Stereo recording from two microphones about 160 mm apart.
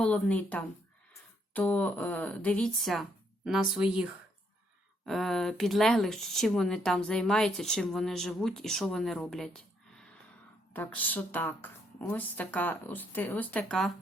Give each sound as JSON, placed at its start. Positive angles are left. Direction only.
{"t": 0.0, "sound": "speech", "side_deg": 5}